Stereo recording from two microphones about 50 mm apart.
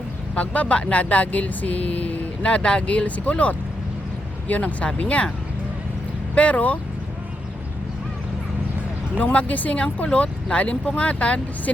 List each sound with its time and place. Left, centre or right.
0.3 s speech: left
6.3 s speech: left
9.1 s speech: left